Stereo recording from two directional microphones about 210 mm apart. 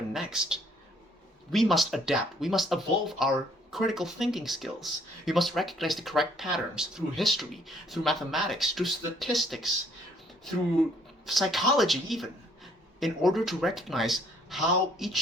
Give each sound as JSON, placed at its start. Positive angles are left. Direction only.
{"t": 0.1, "sound": "speech", "side_deg": -5}
{"t": 11.3, "sound": "speech", "side_deg": 0}